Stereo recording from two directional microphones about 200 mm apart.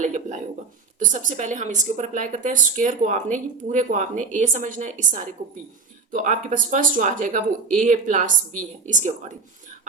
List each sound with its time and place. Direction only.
0.9 s speech: 40° right (ahead or behind)